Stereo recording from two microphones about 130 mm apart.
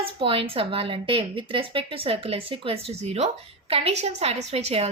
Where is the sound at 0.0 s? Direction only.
45° right (ahead or behind).